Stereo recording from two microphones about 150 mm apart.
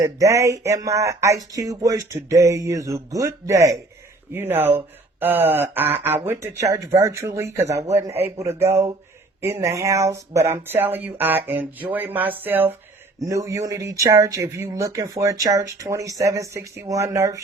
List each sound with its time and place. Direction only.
0.0 s speech: 20° right (ahead or behind)